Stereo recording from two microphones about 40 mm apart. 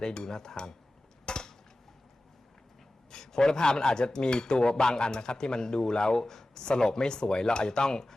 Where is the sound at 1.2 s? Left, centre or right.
Left.